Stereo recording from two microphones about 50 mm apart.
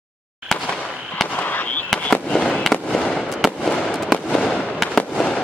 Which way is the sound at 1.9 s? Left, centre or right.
Centre.